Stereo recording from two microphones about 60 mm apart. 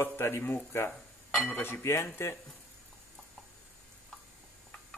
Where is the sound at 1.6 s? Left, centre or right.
Left.